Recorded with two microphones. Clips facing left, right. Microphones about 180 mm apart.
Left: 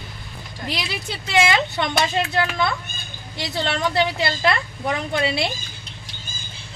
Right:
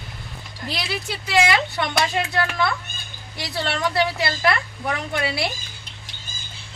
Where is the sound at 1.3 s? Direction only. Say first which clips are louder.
Left 1 dB; 25° left (ahead or behind).